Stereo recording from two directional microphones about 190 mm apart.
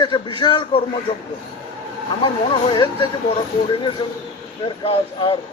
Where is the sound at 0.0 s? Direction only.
25° left (ahead or behind).